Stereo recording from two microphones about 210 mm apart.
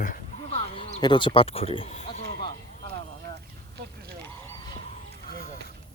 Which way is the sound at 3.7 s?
55° right (ahead or behind).